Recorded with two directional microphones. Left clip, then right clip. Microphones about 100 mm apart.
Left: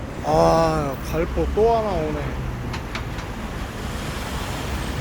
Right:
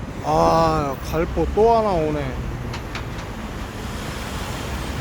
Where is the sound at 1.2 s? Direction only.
30° right (ahead or behind).